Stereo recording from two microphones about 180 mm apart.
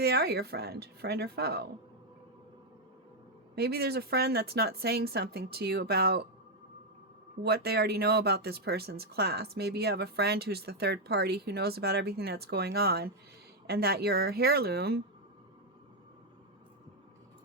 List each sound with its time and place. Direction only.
0.0 s speech: 60° right (ahead or behind)
3.5 s speech: 60° right (ahead or behind)
7.4 s speech: 60° right (ahead or behind)